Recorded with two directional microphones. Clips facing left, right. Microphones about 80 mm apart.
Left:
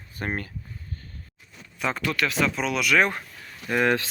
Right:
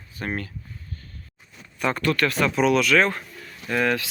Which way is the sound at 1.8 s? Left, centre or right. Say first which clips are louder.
Right 4 dB; centre.